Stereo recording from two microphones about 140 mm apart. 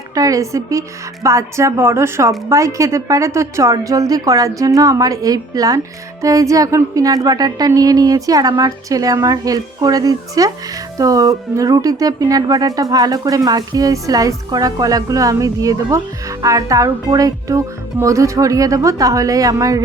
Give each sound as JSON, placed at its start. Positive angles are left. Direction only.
{"t": 0.1, "sound": "speech", "side_deg": -25}